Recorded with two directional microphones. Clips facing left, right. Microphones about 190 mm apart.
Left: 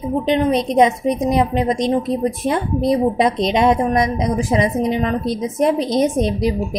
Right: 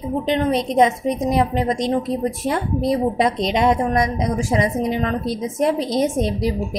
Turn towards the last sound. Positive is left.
turn(degrees=20)  # may be behind; listen again after turning